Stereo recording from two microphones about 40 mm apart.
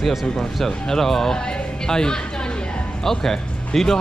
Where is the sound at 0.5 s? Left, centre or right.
Centre.